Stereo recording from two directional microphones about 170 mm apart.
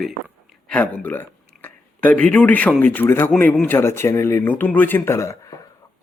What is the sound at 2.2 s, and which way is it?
Speech, 10° left (ahead or behind).